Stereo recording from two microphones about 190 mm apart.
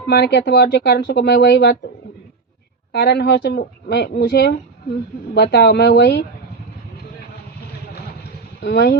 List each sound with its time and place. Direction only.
0.1 s speech: 65° left (ahead or behind)
2.9 s speech: 60° left (ahead or behind)
8.6 s speech: 60° left (ahead or behind)